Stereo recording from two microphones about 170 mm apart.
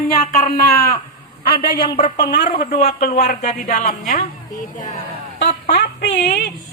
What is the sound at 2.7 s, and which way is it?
A woman's voice, 50° left (ahead or behind).